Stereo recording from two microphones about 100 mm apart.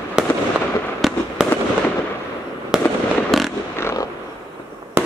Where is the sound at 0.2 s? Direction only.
10° right (ahead or behind).